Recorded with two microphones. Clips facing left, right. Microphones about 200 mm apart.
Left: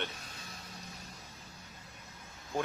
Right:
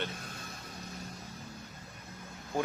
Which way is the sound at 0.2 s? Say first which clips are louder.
Right 5 dB; 50° right (ahead or behind).